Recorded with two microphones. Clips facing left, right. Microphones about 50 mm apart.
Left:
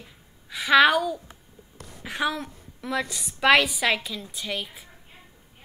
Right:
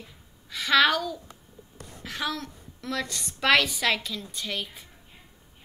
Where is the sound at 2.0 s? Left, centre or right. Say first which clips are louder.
Left 4 dB; centre.